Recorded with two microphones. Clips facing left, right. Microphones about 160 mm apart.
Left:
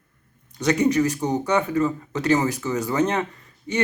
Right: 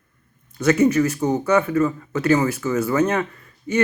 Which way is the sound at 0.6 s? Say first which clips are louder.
Right 3 dB; 15° left (ahead or behind).